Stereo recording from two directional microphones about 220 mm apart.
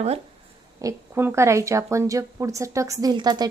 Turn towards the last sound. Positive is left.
turn(degrees=-20)  # may be behind; listen again after turning